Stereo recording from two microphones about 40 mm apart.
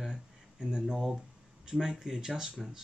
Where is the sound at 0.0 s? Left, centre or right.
Centre.